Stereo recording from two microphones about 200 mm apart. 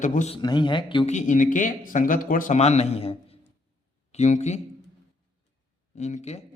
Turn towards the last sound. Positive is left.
turn(degrees=35)  # may be behind; listen again after turning